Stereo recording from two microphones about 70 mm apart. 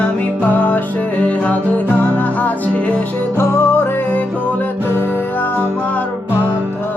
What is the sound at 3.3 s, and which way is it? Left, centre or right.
Music, left.